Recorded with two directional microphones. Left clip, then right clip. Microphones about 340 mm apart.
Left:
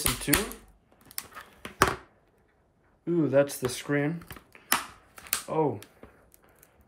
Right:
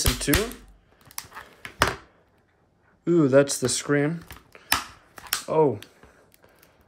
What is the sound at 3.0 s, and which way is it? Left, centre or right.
Speech, centre.